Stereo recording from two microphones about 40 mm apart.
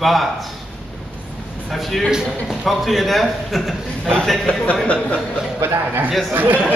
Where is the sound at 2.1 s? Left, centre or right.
Centre.